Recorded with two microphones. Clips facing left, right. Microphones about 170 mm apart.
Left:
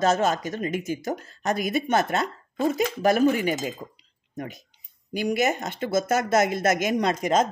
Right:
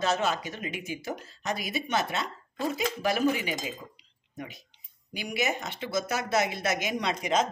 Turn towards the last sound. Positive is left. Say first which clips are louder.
# left 5 dB
turn(degrees=45)  # may be behind; listen again after turning